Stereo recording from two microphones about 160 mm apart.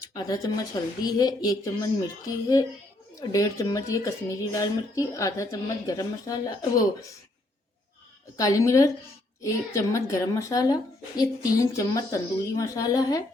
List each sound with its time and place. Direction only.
0.0 s a woman's voice: 20° left (ahead or behind)
8.4 s a woman's voice: 20° left (ahead or behind)